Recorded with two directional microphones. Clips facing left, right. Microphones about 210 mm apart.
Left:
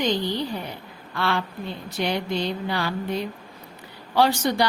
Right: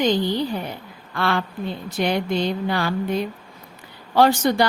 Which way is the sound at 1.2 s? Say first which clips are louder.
Right 3 dB; 50° right (ahead or behind).